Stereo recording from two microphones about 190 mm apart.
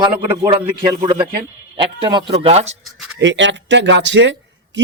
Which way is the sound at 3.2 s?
70° right (ahead or behind).